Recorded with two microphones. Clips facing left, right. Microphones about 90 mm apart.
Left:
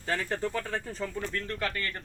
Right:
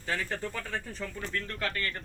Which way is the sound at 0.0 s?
25° left (ahead or behind).